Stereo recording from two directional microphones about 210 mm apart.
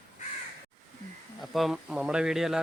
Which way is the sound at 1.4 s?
Centre (ahead or behind).